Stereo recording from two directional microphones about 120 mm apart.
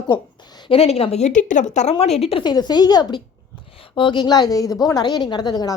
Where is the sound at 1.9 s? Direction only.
60° left (ahead or behind).